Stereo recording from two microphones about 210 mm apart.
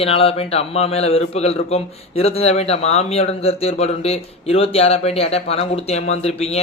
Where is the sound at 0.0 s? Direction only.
25° left (ahead or behind).